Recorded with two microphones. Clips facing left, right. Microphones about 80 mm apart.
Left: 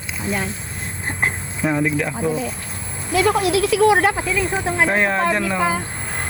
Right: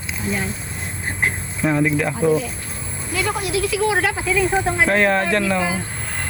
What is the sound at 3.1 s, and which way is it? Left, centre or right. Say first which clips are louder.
Speech: left 6 dB; left.